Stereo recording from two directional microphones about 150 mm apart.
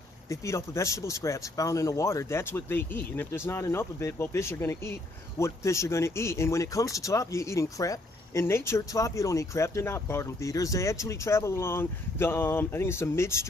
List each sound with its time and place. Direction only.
0.3 s speech: 20° left (ahead or behind)